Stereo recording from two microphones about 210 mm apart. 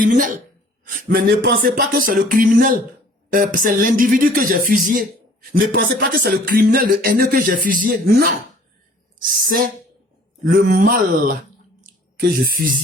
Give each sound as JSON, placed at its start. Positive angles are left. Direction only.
{"t": 0.0, "sound": "speech", "side_deg": -40}